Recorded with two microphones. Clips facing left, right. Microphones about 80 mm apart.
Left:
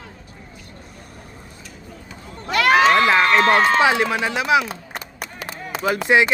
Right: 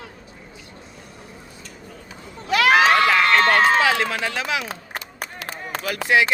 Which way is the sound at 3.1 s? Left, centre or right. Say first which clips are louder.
Left 2 dB; centre.